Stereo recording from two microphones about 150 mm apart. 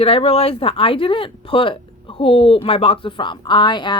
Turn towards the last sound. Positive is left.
turn(degrees=30)  # may be behind; listen again after turning